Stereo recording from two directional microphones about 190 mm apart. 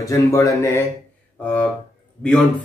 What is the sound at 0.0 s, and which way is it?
Speech, 15° left (ahead or behind).